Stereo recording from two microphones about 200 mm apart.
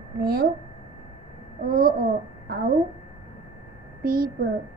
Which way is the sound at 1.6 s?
45° right (ahead or behind).